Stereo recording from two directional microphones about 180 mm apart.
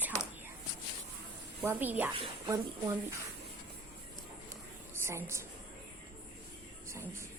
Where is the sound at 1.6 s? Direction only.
10° right (ahead or behind).